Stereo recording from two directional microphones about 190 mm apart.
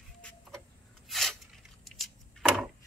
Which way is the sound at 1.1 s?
Centre (ahead or behind).